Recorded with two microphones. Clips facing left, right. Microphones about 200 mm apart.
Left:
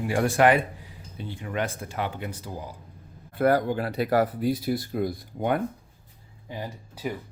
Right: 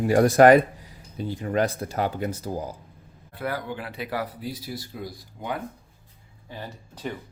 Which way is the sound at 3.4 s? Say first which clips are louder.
Left 9 dB; 45° left (ahead or behind).